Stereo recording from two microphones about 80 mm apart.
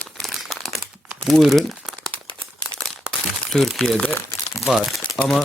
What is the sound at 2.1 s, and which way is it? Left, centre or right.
Crumpling, right.